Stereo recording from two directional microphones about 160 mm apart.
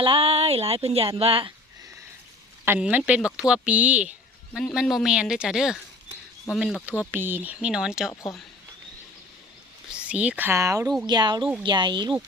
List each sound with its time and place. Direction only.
0.0 s speech: 35° right (ahead or behind)
2.6 s speech: 10° right (ahead or behind)
8.1 s speech: 20° left (ahead or behind)
9.9 s speech: 10° right (ahead or behind); by 12.1 s 30° right (ahead or behind)